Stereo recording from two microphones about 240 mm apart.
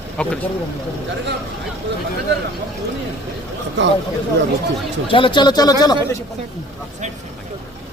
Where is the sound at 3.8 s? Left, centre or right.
Right.